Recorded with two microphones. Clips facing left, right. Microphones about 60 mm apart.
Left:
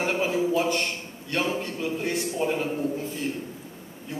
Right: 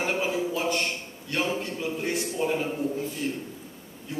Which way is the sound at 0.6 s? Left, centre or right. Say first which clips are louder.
Left 3 dB; left.